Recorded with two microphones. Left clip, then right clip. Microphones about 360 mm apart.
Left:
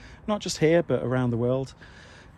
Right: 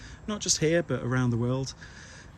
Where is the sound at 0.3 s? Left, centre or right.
Centre.